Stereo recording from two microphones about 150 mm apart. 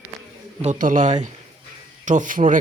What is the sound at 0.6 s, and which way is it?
Speech, 55° right (ahead or behind).